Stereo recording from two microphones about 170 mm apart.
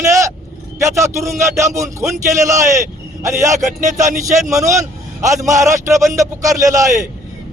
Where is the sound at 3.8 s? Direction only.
45° right (ahead or behind).